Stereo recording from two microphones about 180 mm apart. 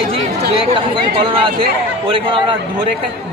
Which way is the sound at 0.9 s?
30° right (ahead or behind).